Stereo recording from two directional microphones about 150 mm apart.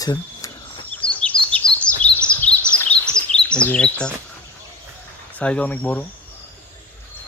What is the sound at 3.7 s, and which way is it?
Speech, 5° left (ahead or behind).